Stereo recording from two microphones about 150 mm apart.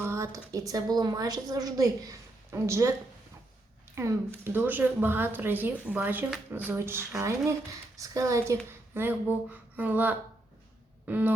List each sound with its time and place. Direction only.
0.0 s a sound: 15° right (ahead or behind)
0.7 s a woman's voice: 25° right (ahead or behind)
4.0 s a woman's voice: 20° right (ahead or behind)